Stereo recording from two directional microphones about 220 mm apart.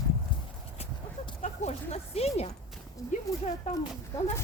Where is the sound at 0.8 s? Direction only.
30° left (ahead or behind).